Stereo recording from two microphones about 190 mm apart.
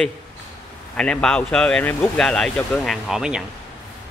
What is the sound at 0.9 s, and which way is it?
Speech, 5° left (ahead or behind).